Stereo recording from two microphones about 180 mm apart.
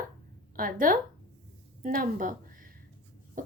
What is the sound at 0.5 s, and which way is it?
A woman's voice, 50° right (ahead or behind).